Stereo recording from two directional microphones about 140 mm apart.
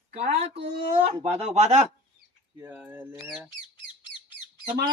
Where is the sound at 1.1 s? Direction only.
45° right (ahead or behind).